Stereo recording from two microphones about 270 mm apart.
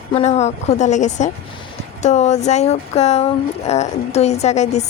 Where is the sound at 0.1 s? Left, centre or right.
Left.